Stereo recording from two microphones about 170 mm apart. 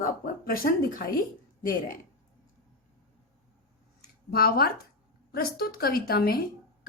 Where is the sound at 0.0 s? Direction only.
60° left (ahead or behind).